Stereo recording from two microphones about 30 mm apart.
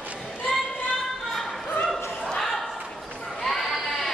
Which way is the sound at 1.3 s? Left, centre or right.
Centre.